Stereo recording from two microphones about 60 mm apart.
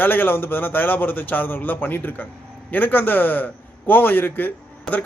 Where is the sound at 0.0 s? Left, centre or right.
Left.